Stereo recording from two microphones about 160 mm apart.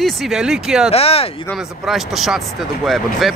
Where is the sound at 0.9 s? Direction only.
40° left (ahead or behind).